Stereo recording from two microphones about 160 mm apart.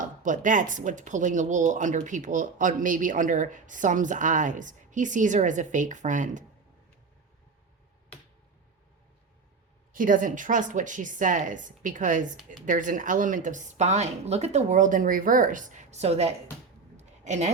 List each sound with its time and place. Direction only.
0.0 s speech: 55° right (ahead or behind)
9.9 s speech: 55° right (ahead or behind); by 16.3 s 40° right (ahead or behind)
17.0 s a sound: 45° right (ahead or behind)